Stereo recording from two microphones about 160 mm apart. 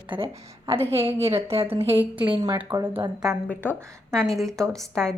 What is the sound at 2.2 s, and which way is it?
Speech, 30° right (ahead or behind).